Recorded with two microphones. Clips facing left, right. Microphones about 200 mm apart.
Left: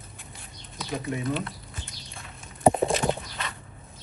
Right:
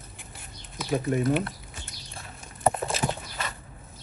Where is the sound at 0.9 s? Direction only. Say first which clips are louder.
Right 5 dB; 45° right (ahead or behind).